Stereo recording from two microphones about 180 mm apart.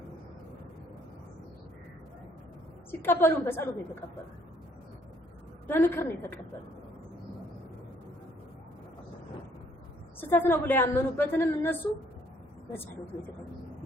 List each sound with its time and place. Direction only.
2.9 s a woman's voice: 10° left (ahead or behind)
5.6 s a woman's voice: 10° left (ahead or behind)
10.2 s a woman's voice: 10° left (ahead or behind)